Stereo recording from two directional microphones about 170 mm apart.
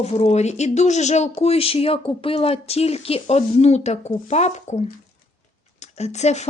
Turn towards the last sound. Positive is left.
turn(degrees=40)  # may be behind; listen again after turning